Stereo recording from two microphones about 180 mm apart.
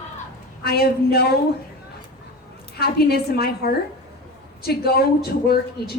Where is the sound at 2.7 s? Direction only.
60° left (ahead or behind).